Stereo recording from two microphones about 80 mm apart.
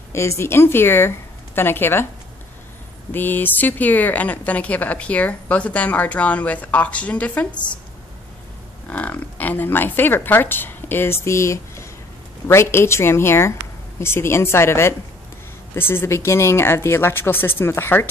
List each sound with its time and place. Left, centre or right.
0.1 s speech: left
3.1 s speech: left
8.8 s speech: centre